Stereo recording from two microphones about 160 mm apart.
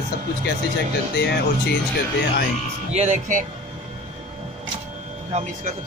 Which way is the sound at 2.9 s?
45° right (ahead or behind).